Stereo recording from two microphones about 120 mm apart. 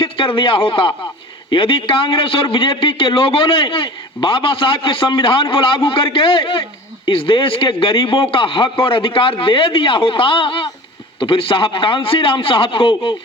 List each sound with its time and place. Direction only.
0.0 s a man's voice: 45° left (ahead or behind)